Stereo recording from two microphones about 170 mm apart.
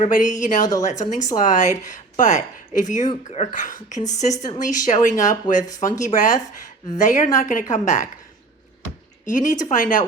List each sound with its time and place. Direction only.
0.1 s a woman's voice: 50° left (ahead or behind)
9.2 s a woman's voice: 50° left (ahead or behind)